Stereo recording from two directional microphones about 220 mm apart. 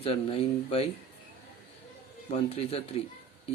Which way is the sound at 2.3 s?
25° left (ahead or behind).